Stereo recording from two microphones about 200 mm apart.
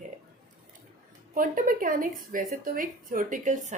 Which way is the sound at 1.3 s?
45° right (ahead or behind).